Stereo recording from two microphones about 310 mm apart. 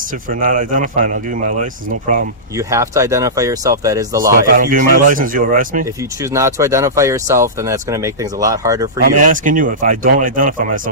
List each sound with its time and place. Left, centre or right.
0.0 s speech: right
2.6 s speech: centre
4.5 s speech: right
6.0 s speech: centre
9.0 s speech: right